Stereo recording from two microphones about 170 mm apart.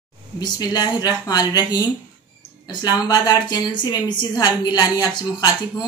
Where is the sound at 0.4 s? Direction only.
25° left (ahead or behind).